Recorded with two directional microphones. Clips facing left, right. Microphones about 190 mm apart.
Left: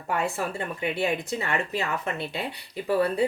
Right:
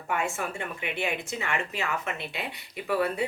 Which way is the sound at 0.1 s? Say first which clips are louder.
Left 3 dB; 35° left (ahead or behind).